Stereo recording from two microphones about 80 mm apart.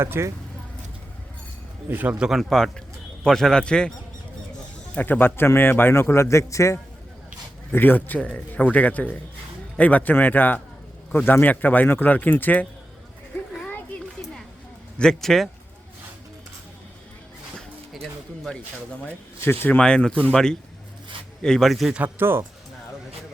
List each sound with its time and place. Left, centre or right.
0.0 s speech: right
1.9 s speech: right
2.1 s speech: centre
2.4 s a man's voice: centre
4.9 s a man's voice: left
7.7 s a man's voice: left
14.9 s speech: centre
19.4 s a man's voice: left
19.8 s a man's voice: centre
21.9 s speech: right